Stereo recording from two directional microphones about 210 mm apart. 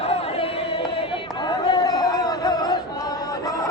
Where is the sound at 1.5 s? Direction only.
20° left (ahead or behind).